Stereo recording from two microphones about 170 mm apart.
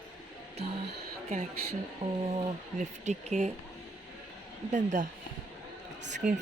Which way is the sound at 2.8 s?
45° right (ahead or behind).